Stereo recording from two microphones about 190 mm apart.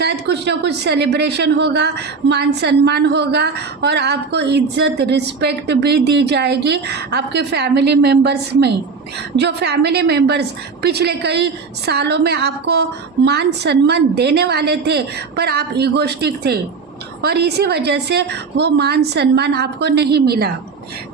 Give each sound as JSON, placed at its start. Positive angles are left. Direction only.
{"t": 0.0, "sound": "speech", "side_deg": -65}